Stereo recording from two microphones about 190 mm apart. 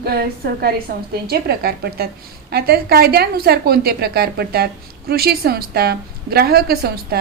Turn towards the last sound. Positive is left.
turn(degrees=-55)  # may be behind; listen again after turning